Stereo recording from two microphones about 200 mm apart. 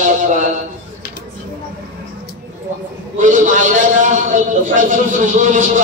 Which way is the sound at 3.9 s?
40° right (ahead or behind).